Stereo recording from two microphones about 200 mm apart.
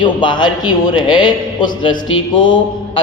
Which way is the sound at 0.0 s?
25° left (ahead or behind).